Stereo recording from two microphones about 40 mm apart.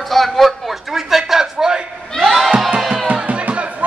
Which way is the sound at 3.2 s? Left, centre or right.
Right.